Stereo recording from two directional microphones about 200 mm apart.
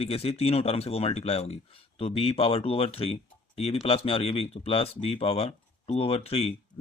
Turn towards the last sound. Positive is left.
turn(degrees=30)  # may be behind; listen again after turning